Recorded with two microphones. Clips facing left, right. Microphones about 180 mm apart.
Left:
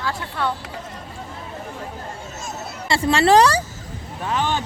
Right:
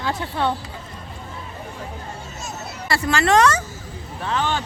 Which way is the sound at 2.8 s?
25° left (ahead or behind).